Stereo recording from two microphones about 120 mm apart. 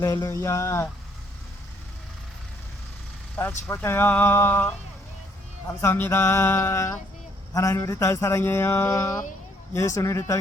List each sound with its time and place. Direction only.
0.0 s speech: 30° left (ahead or behind)
3.3 s speech: 15° left (ahead or behind)
5.8 s speech: 20° left (ahead or behind)